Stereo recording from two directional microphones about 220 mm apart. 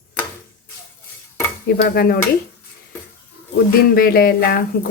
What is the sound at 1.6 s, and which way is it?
Speech, 45° left (ahead or behind).